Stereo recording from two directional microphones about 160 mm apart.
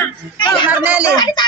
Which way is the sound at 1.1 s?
25° left (ahead or behind).